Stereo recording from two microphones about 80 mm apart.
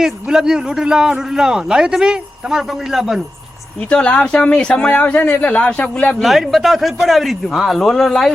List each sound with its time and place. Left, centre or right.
0.0 s speech: centre
3.8 s speech: centre
6.2 s speech: centre